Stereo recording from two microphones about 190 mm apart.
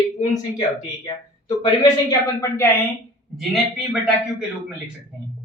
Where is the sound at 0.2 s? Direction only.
40° left (ahead or behind).